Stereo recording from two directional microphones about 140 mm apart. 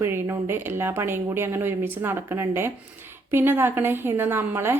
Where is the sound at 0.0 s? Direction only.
15° right (ahead or behind).